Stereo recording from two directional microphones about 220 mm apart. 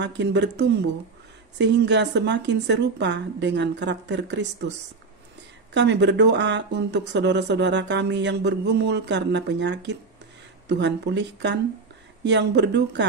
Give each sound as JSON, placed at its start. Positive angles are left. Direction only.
{"t": 0.0, "sound": "speech", "side_deg": -50}
{"t": 5.8, "sound": "speech", "side_deg": -50}